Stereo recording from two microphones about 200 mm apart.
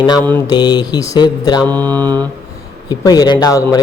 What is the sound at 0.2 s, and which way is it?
Mantra, 10° left (ahead or behind).